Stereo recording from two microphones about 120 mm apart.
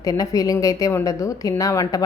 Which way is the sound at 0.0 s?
30° left (ahead or behind).